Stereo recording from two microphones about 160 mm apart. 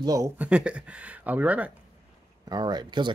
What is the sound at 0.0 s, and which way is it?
Speech, 20° right (ahead or behind).